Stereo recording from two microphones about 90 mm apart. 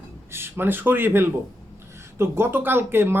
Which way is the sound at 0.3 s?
25° right (ahead or behind).